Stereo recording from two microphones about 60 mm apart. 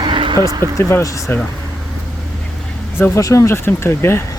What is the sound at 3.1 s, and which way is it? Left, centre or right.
Speech, left.